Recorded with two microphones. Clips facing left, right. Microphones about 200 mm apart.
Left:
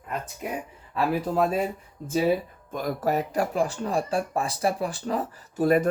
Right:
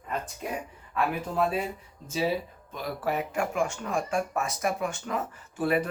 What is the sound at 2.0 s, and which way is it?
Speech, 50° left (ahead or behind).